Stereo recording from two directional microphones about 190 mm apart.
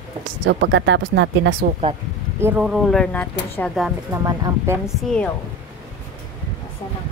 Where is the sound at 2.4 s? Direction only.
10° right (ahead or behind).